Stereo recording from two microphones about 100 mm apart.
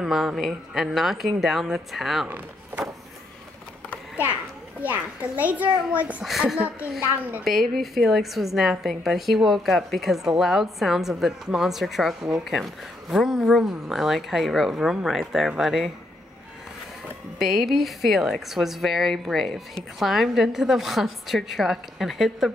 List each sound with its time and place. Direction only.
0.0 s a woman's voice: 5° right (ahead or behind)
2.2 s speech: 20° right (ahead or behind)
4.8 s a child's voice: 15° right (ahead or behind)
6.2 s a child's voice: 5° right (ahead or behind)
7.4 s a woman's voice: centre (ahead or behind)
17.4 s a woman's voice: centre (ahead or behind)